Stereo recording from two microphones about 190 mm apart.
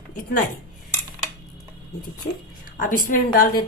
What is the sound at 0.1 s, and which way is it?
Speech, 45° left (ahead or behind).